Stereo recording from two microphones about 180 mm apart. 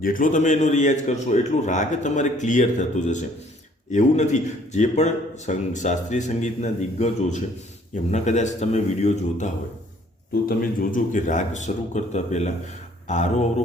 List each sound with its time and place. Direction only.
0.0 s a man's voice: 50° left (ahead or behind)
10.4 s a man's voice: 50° left (ahead or behind)